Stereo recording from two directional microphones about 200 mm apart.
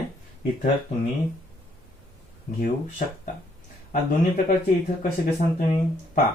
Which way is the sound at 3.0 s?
40° left (ahead or behind).